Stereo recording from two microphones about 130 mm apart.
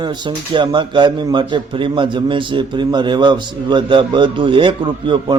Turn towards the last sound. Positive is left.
turn(degrees=-40)  # may be behind; listen again after turning